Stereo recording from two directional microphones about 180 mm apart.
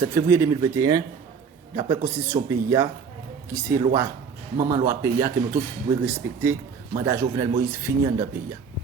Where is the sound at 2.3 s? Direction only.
25° right (ahead or behind).